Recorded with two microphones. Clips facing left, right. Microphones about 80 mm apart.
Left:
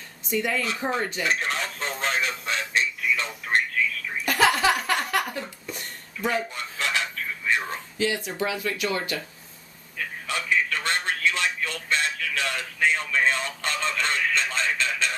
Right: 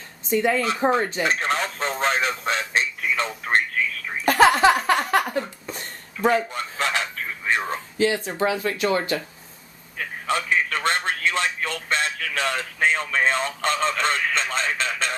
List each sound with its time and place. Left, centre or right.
0.3 s speech: right
4.3 s a sound: right
7.6 s speech: right
10.2 s telephone: right